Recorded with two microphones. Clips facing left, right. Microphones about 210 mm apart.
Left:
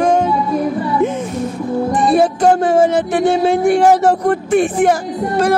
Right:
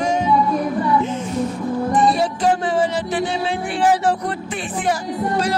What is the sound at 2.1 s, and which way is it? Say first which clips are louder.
Speech: left 6 dB; 50° left (ahead or behind).